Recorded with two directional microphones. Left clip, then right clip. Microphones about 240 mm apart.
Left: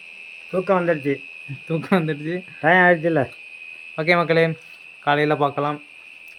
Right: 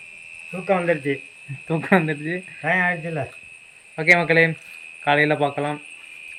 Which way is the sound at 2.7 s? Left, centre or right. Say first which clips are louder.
Left 6 dB; left.